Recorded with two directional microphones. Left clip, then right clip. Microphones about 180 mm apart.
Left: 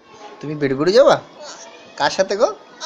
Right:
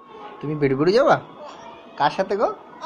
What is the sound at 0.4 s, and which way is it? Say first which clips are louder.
Speech: left 1 dB; 40° left (ahead or behind).